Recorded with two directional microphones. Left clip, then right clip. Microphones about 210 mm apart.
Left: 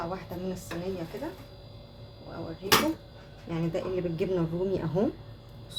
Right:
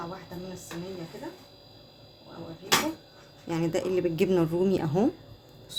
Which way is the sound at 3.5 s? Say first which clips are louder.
Right 4 dB; 45° right (ahead or behind).